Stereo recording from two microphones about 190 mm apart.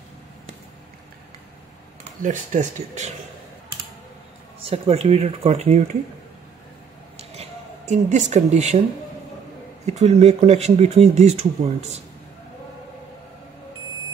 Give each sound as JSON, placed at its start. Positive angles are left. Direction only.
{"t": 2.2, "sound": "speech", "side_deg": -40}
{"t": 4.6, "sound": "speech", "side_deg": -30}
{"t": 7.2, "sound": "a sound", "side_deg": -35}
{"t": 9.8, "sound": "speech", "side_deg": -35}